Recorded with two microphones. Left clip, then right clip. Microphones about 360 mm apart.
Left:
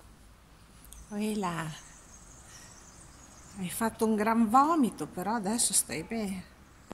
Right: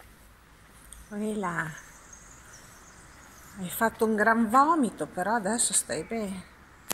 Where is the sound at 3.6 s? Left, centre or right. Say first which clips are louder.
Right 4 dB; centre.